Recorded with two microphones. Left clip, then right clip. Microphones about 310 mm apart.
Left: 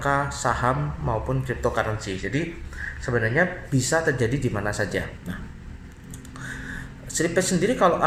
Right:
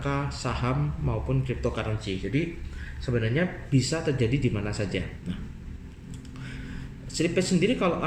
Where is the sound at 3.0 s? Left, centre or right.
Left.